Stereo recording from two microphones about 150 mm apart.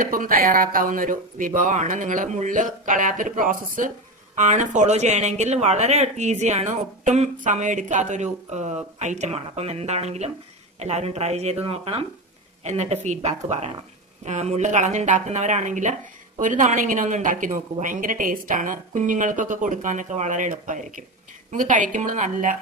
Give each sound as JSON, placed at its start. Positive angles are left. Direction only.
{"t": 0.0, "sound": "a woman's voice", "side_deg": -65}